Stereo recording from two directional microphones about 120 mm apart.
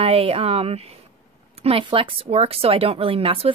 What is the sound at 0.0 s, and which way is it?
Speech, 55° right (ahead or behind).